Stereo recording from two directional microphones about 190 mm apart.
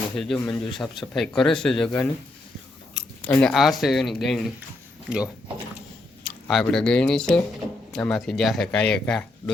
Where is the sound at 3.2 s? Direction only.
5° left (ahead or behind).